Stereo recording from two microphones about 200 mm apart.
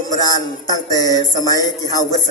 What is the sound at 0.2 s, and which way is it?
A man's voice, 20° left (ahead or behind).